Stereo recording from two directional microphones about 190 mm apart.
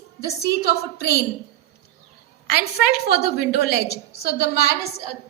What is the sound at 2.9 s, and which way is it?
A woman's voice, 55° left (ahead or behind).